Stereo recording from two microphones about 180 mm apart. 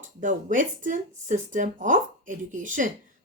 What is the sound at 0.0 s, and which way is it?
Speech, 45° right (ahead or behind).